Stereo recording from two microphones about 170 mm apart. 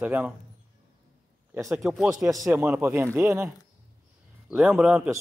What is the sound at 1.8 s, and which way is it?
Speech, centre (ahead or behind).